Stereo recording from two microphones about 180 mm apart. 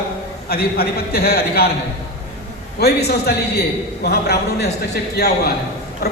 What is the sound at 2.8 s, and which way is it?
Speech, 60° left (ahead or behind).